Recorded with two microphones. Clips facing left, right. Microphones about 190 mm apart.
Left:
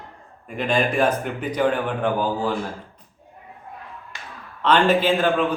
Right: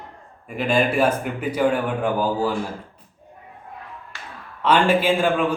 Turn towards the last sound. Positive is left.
turn(degrees=-10)  # may be behind; listen again after turning